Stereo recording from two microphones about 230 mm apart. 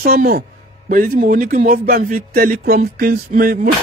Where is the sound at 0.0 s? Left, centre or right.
Right.